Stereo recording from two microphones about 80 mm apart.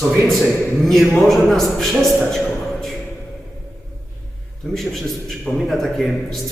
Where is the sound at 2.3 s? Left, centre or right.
Centre.